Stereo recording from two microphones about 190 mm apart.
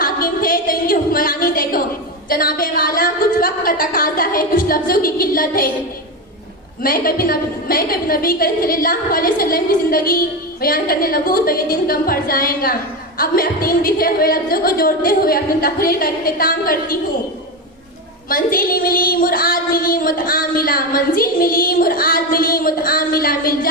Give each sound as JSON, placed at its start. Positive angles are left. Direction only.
{"t": 0.0, "sound": "a sound", "side_deg": 50}
{"t": 2.3, "sound": "a woman's voice", "side_deg": 50}
{"t": 6.8, "sound": "a woman's voice", "side_deg": 50}
{"t": 18.3, "sound": "a woman's voice", "side_deg": 50}